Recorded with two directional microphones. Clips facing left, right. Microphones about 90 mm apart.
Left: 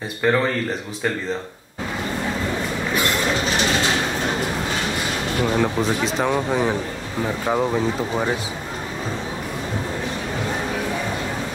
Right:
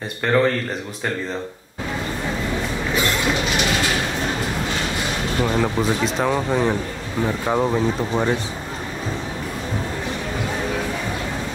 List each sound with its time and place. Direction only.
0.2 s speech: 5° left (ahead or behind)
5.4 s speech: centre (ahead or behind)